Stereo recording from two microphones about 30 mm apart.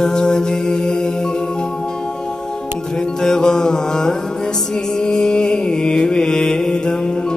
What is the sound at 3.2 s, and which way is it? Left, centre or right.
Music, left.